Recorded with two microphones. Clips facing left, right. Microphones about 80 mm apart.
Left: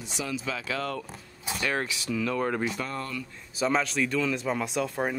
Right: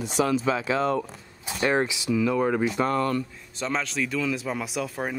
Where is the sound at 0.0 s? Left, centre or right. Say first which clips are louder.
Right 10 dB; right.